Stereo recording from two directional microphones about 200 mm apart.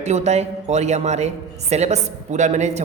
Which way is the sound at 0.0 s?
35° right (ahead or behind).